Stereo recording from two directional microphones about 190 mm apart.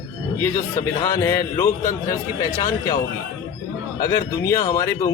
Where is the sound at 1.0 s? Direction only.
15° left (ahead or behind).